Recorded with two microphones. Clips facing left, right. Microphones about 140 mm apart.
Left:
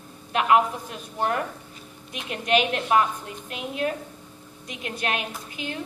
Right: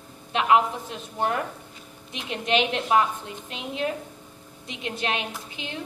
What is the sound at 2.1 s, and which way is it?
A woman's voice, 25° right (ahead or behind).